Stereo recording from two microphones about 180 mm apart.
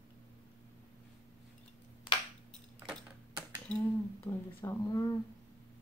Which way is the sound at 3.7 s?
5° left (ahead or behind).